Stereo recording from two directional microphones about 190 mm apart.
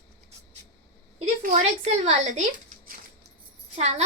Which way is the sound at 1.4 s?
35° right (ahead or behind).